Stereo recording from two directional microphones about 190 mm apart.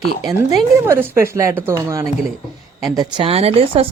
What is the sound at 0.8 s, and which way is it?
Speech, 10° right (ahead or behind).